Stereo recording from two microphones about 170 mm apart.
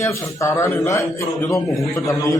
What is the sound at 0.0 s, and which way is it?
A man's voice, 15° left (ahead or behind).